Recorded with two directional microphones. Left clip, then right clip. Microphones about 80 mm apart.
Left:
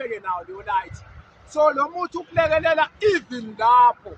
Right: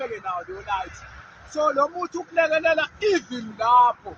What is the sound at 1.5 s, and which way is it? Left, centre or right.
Speech, left.